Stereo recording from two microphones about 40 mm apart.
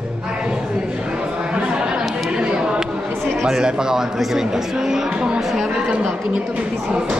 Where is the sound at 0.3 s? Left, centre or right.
Right.